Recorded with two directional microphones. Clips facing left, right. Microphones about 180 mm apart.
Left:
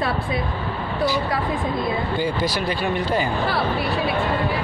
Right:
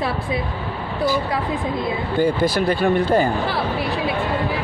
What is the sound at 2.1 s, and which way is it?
Speech, 55° right (ahead or behind).